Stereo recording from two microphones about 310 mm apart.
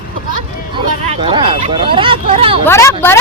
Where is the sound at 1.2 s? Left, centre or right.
Centre.